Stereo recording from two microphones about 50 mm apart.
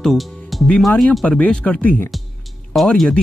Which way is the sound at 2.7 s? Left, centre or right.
Centre.